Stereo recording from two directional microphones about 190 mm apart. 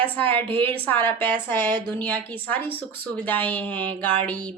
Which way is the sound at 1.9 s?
10° left (ahead or behind).